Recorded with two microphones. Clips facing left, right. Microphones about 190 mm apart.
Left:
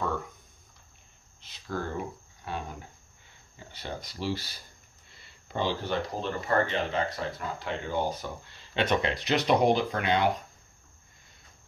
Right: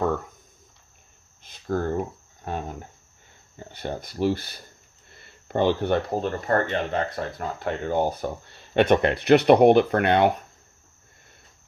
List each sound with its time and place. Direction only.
1.4 s speech: 50° right (ahead or behind)